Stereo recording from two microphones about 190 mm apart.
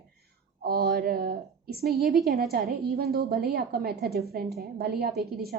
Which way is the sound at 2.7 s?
55° right (ahead or behind).